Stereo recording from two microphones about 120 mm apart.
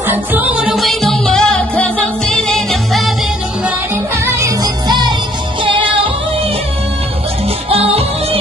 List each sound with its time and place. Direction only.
0.0 s music: 15° right (ahead or behind)
0.7 s music: centre (ahead or behind)
4.2 s music: 25° right (ahead or behind)
4.8 s music: 35° right (ahead or behind)